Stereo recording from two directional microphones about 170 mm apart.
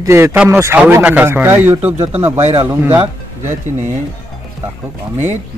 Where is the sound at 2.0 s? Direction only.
40° right (ahead or behind).